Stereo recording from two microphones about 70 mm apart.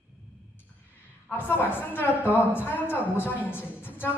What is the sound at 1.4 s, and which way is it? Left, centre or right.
A woman's voice, left.